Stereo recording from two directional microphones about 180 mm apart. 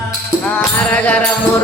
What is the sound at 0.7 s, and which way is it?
Music, 10° left (ahead or behind).